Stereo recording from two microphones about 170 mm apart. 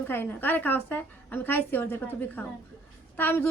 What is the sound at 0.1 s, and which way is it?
A woman's voice, 10° left (ahead or behind).